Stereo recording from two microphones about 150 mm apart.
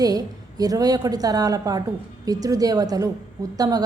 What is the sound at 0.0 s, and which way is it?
A woman's voice, 25° right (ahead or behind).